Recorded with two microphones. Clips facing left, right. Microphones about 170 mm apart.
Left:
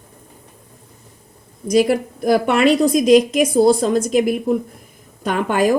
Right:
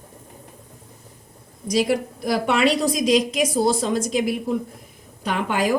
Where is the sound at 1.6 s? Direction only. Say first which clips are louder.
Left 5 dB; 55° left (ahead or behind).